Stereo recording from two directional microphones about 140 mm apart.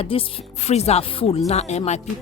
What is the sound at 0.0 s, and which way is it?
Speech, 40° left (ahead or behind).